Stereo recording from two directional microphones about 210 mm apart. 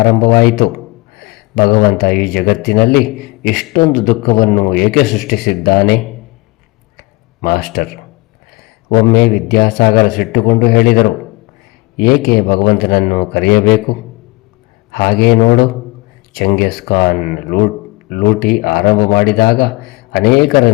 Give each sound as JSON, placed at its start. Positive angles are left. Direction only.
{"t": 0.0, "sound": "a man's voice", "side_deg": 45}
{"t": 7.4, "sound": "speech", "side_deg": 45}
{"t": 8.9, "sound": "speech", "side_deg": 45}
{"t": 14.9, "sound": "a man's voice", "side_deg": 50}